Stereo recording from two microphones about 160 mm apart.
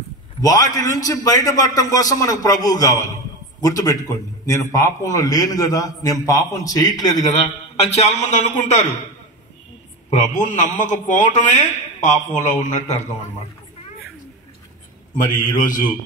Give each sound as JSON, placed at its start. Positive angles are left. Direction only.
{"t": 0.4, "sound": "a man's voice", "side_deg": 20}
{"t": 7.2, "sound": "a man's voice", "side_deg": 45}
{"t": 10.0, "sound": "a man's voice", "side_deg": 45}
{"t": 15.5, "sound": "a man's voice", "side_deg": 55}